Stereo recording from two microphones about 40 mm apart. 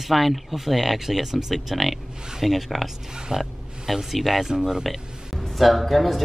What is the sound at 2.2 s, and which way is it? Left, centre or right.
Speech, centre.